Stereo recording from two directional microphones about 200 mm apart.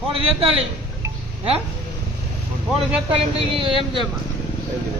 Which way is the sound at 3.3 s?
25° right (ahead or behind).